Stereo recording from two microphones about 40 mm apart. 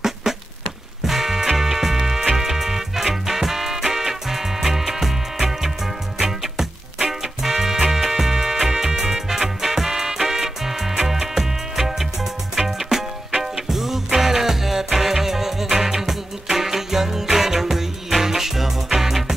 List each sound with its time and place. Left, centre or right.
0.0 s music: centre